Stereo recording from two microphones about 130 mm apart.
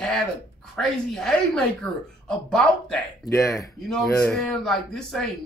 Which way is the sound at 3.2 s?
25° left (ahead or behind).